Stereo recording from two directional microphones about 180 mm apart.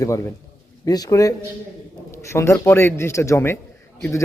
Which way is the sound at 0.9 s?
20° left (ahead or behind).